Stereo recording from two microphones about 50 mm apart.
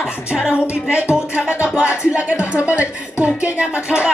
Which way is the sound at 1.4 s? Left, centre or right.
Right.